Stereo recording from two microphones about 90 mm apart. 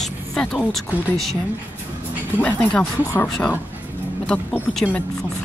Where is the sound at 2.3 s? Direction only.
15° left (ahead or behind).